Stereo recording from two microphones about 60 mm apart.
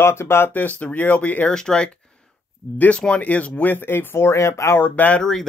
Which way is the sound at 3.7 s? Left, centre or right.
Left.